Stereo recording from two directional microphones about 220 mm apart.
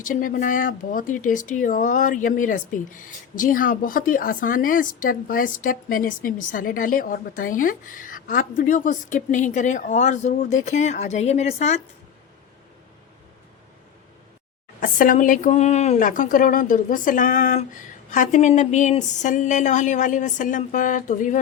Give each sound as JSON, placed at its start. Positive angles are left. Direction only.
{"t": 0.0, "sound": "speech", "side_deg": 40}
{"t": 14.8, "sound": "speech", "side_deg": 35}